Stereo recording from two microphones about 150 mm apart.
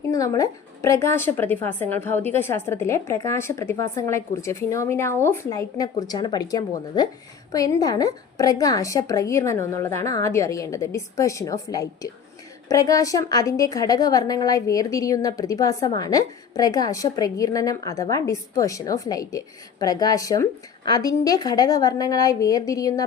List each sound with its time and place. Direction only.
0.1 s a woman's voice: 20° left (ahead or behind)